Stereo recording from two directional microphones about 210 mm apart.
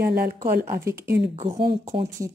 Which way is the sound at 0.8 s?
15° right (ahead or behind).